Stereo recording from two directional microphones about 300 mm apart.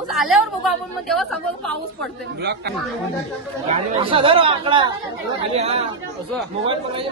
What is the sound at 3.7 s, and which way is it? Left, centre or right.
Speech, centre.